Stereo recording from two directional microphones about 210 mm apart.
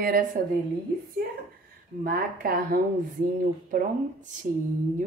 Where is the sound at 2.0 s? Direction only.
40° right (ahead or behind).